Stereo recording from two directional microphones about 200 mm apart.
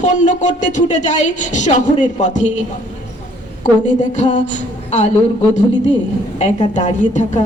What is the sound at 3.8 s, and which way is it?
Speech, 40° left (ahead or behind).